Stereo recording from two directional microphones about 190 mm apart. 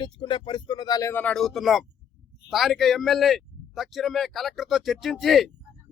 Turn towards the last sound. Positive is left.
turn(degrees=0)  # may be behind; listen again after turning